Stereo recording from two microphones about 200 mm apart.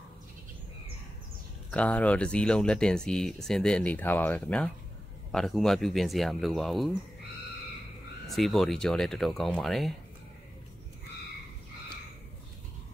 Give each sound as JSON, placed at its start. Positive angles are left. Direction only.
{"t": 1.7, "sound": "speech", "side_deg": 5}
{"t": 8.3, "sound": "speech", "side_deg": 0}